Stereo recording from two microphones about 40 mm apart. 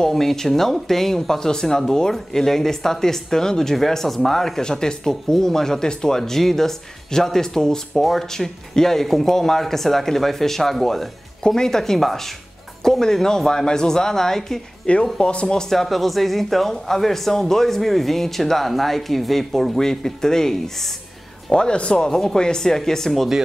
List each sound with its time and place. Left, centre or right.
0.1 s speech: centre
15.1 s speech: left
15.4 s speech: centre
21.5 s speech: left